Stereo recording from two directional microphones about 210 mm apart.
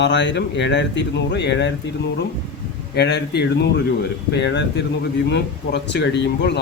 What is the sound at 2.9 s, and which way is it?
Speech, 50° left (ahead or behind).